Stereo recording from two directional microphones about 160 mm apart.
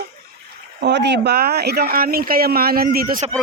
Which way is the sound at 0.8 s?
90° right.